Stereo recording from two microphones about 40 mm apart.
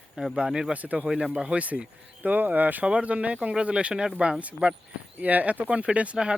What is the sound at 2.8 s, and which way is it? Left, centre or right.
Speech, right.